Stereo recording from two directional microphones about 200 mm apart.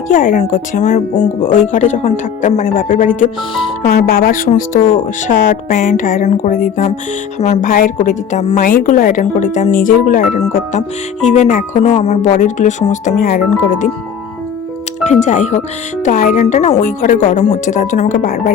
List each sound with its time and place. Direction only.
0.1 s speech: 40° left (ahead or behind)
15.0 s speech: 35° left (ahead or behind)